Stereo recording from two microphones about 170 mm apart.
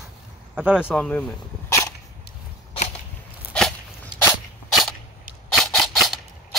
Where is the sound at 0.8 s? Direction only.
10° left (ahead or behind).